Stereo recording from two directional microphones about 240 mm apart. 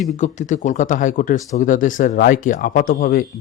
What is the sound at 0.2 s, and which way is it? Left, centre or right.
Speech, left.